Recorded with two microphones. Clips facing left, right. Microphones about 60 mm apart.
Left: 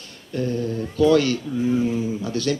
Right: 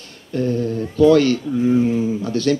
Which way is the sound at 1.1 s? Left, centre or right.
Right.